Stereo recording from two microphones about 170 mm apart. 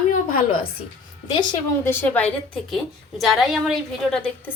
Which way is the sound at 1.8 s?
10° left (ahead or behind).